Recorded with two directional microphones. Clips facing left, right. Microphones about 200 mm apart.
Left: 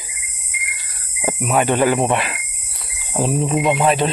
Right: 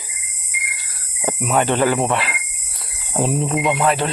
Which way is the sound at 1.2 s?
10° left (ahead or behind).